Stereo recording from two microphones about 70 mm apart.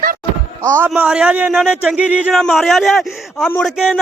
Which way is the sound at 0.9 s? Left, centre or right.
Centre.